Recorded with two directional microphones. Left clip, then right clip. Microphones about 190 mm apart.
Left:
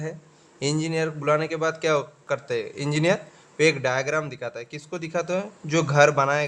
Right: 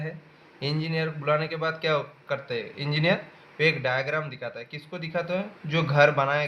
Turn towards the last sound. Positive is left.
turn(degrees=40)  # may be behind; listen again after turning